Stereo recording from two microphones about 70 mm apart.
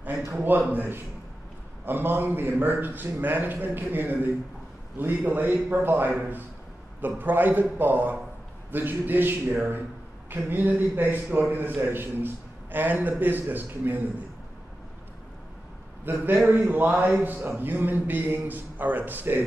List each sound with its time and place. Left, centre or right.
0.7 s a man's voice: right
7.2 s a man's voice: right
16.1 s a man's voice: right